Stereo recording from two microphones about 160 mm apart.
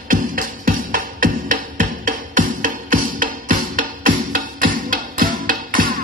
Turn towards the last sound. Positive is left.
turn(degrees=-60)  # may be behind; listen again after turning